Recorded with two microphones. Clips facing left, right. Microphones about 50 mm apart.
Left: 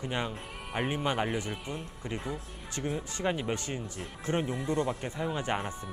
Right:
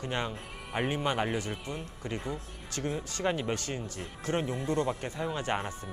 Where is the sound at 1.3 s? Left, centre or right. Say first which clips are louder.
Even; left.